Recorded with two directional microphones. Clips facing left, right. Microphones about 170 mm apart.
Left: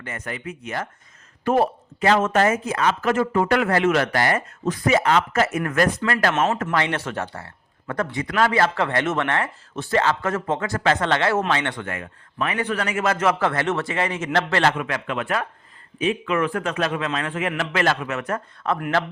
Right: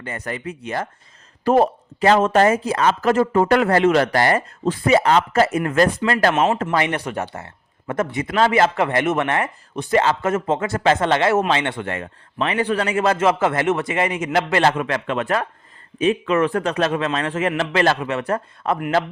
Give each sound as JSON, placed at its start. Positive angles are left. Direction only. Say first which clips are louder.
{"t": 0.0, "sound": "speech", "louder": "right 3 dB", "side_deg": -35}
{"t": 6.3, "sound": "a man's voice", "louder": "right 3 dB", "side_deg": -15}
{"t": 14.7, "sound": "speech", "louder": "right 4 dB", "side_deg": -35}